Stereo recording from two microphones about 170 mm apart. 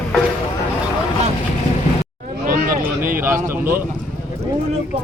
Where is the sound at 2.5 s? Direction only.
55° right (ahead or behind).